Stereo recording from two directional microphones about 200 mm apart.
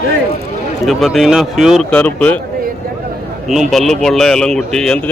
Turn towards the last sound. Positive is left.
turn(degrees=0)  # may be behind; listen again after turning